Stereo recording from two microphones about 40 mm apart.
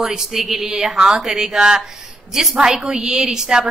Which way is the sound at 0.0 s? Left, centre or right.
Centre.